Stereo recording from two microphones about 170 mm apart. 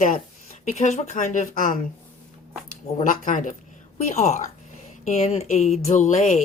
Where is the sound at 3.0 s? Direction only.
50° left (ahead or behind).